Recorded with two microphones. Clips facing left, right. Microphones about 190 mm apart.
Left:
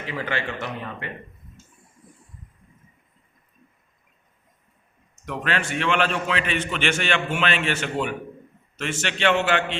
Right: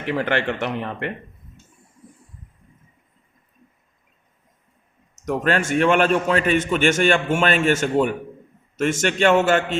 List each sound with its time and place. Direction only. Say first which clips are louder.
0.0 s speech: right 7 dB; 65° right (ahead or behind)
5.2 s a man's voice: right 6 dB; 45° right (ahead or behind)